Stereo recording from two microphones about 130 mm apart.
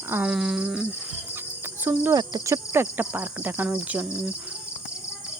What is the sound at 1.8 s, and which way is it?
Speech, 15° right (ahead or behind).